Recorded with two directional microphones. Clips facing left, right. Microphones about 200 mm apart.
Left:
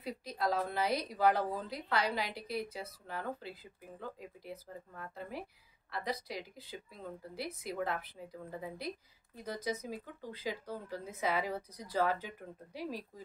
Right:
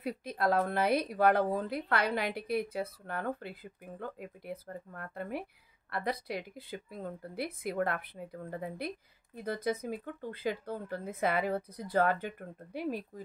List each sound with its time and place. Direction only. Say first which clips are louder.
0.0 s speech: right 4 dB; 55° right (ahead or behind)